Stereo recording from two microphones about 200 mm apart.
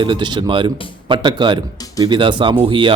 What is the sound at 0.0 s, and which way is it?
A man's voice, 25° right (ahead or behind).